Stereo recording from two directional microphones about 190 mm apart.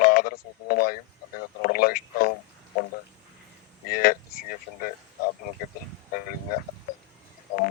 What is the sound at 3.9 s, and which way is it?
Speech, 50° left (ahead or behind).